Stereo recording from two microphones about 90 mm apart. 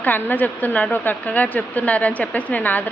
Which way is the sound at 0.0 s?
20° left (ahead or behind).